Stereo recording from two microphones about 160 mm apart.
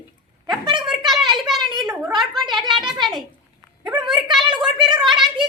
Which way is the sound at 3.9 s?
30° right (ahead or behind).